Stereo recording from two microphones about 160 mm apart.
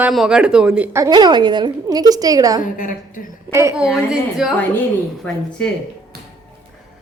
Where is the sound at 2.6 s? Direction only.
55° left (ahead or behind).